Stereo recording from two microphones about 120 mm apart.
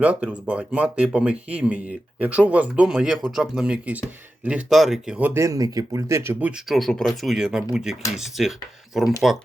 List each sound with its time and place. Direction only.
0.0 s speech: 10° right (ahead or behind)
5.3 s speech: 25° right (ahead or behind)
6.7 s speech: 5° left (ahead or behind)